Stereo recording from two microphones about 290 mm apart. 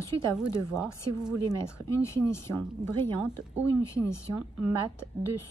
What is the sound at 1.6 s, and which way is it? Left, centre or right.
Speech, centre.